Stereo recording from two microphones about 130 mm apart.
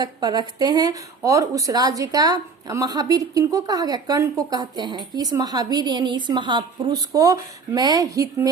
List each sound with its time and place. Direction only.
0.0 s a woman's voice: 30° right (ahead or behind)